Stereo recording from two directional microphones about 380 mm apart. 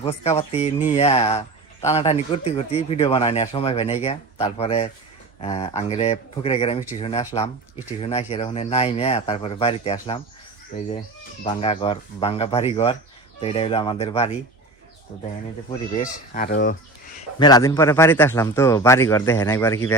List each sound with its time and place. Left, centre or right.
0.0 s speech: centre
11.4 s speech: centre
15.7 s speech: centre
17.4 s speech: centre